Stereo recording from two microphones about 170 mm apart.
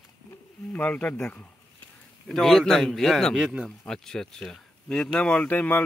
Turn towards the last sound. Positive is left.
turn(degrees=10)  # may be behind; listen again after turning